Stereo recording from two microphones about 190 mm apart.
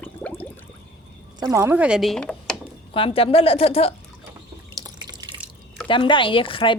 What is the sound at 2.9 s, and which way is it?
Speech, 30° left (ahead or behind).